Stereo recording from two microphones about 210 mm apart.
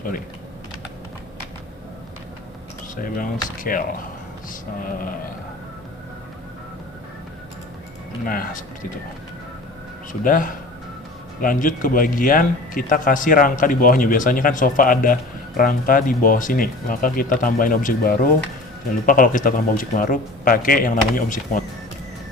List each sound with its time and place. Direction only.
2.9 s speech: 40° left (ahead or behind)
8.2 s speech: 40° left (ahead or behind)
10.1 s speech: 40° left (ahead or behind)